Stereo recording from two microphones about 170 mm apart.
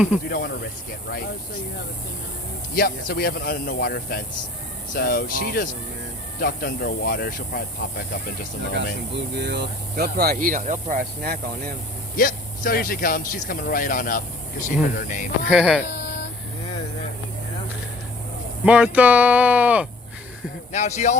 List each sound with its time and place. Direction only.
0.3 s speech: 65° left (ahead or behind)
2.7 s speech: 60° left (ahead or behind)
8.7 s speech: 85° right; by 11.3 s 55° right (ahead or behind)
12.1 s a man's voice: 55° left (ahead or behind)
15.4 s speech: 5° right (ahead or behind)
18.6 s speech: 5° right (ahead or behind)
20.7 s a man's voice: 45° left (ahead or behind)